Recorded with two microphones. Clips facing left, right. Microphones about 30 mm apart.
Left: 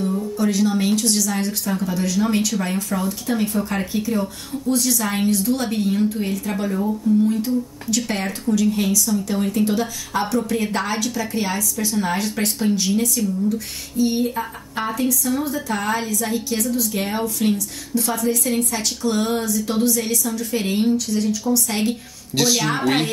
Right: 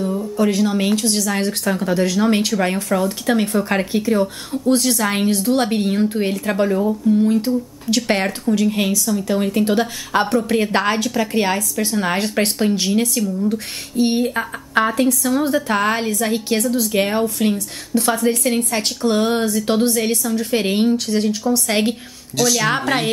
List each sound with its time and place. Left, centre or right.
0.4 s speech: right
1.3 s speech: right
7.9 s speech: right
8.5 s speech: right